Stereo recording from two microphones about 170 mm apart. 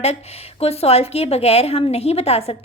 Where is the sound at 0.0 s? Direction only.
40° left (ahead or behind).